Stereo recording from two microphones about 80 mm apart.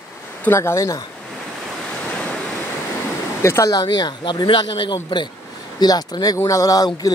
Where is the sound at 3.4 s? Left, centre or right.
Left.